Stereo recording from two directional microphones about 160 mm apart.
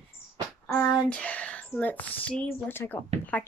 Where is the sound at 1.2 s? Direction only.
10° left (ahead or behind).